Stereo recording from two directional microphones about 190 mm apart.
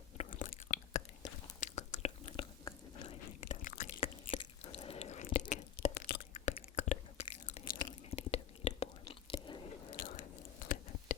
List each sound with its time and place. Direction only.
0.2 s chewing: 40° left (ahead or behind); by 3.2 s 20° left (ahead or behind)
3.4 s a sound: 45° left (ahead or behind)
4.0 s chewing: 30° left (ahead or behind)
5.9 s whispering: 60° left (ahead or behind)
6.3 s whispering: 35° left (ahead or behind)
9.2 s chewing: 25° left (ahead or behind)
10.0 s biting: 35° left (ahead or behind)
10.6 s a sound: 45° left (ahead or behind)